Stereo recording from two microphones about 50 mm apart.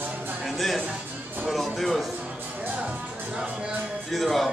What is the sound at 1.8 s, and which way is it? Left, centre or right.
Speech, centre.